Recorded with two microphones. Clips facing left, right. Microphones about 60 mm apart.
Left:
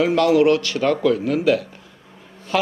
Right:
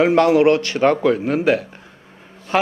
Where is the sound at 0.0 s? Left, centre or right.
Right.